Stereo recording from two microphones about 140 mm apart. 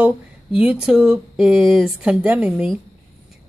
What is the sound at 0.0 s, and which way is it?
Speech, 5° right (ahead or behind).